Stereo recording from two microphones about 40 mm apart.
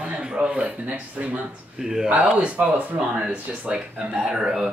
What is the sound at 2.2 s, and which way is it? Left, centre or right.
Speech, right.